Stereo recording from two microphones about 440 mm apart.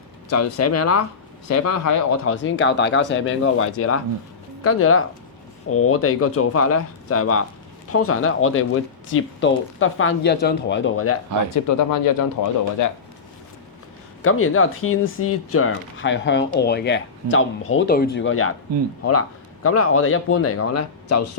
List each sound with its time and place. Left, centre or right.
0.3 s speech: left
2.3 s speech: left
11.5 s speech: left
14.2 s speech: left
19.6 s speech: left